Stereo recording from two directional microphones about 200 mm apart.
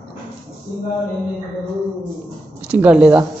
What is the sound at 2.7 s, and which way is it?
Speech, 5° right (ahead or behind).